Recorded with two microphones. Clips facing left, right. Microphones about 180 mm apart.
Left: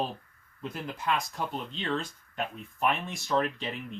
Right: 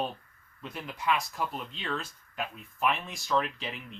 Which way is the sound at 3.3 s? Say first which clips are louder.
Left 1 dB; 40° left (ahead or behind).